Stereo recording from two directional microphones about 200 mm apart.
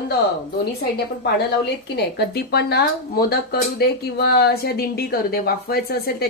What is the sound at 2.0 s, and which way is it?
Speech, 55° left (ahead or behind).